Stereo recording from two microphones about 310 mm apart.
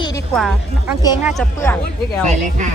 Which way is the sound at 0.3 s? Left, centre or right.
Centre.